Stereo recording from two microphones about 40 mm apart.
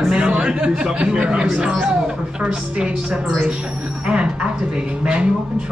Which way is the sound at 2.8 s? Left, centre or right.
Right.